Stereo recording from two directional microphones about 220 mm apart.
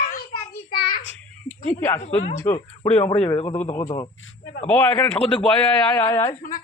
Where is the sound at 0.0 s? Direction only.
40° left (ahead or behind).